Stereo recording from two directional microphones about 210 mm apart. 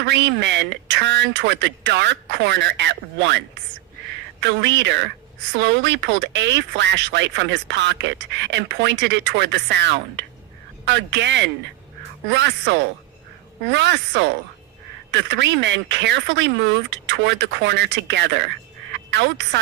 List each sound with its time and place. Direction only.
0.0 s speech: 55° right (ahead or behind)